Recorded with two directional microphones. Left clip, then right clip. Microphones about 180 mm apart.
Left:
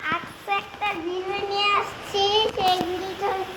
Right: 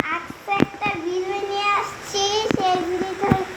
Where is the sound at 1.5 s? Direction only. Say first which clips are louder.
Even; 5° left (ahead or behind).